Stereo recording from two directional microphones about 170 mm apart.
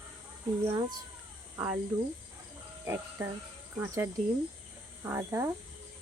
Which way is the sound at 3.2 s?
15° right (ahead or behind).